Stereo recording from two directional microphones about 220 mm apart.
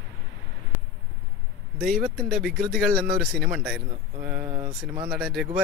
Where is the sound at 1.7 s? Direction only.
Centre (ahead or behind).